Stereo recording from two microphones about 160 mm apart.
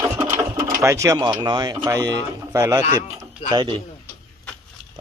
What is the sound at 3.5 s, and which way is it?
Speech, 30° right (ahead or behind).